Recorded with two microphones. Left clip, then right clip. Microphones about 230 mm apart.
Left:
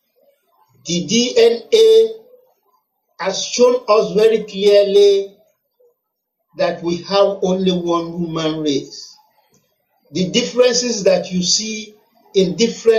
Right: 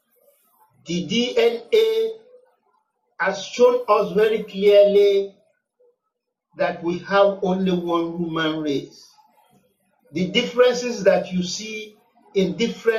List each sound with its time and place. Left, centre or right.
0.8 s a man's voice: left
3.2 s a man's voice: left
6.6 s a man's voice: left
10.2 s a man's voice: left